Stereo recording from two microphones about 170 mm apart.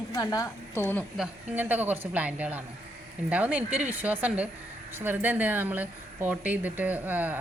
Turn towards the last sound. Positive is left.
turn(degrees=-10)  # may be behind; listen again after turning